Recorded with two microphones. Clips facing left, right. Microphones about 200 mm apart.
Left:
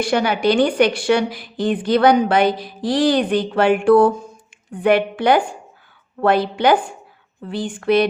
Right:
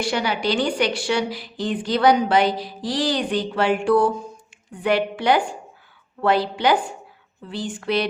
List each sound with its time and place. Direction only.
0.0 s a woman's voice: 50° left (ahead or behind)